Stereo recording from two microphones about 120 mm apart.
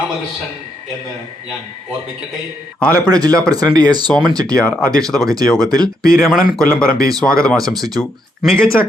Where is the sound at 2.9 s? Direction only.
30° right (ahead or behind).